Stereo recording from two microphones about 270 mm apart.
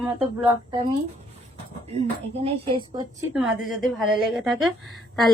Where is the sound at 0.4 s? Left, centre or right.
Centre.